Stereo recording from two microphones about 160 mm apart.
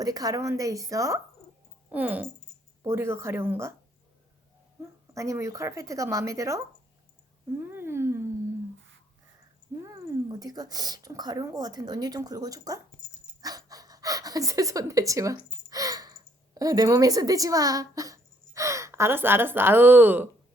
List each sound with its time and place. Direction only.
0.0 s speech: 25° right (ahead or behind)
4.8 s speech: 20° right (ahead or behind)
7.6 s speech: 15° right (ahead or behind)
9.7 s cat: 15° right (ahead or behind)
10.2 s speech: 25° right (ahead or behind)